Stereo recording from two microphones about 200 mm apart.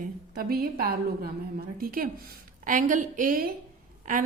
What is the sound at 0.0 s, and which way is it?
A woman's voice, 50° right (ahead or behind).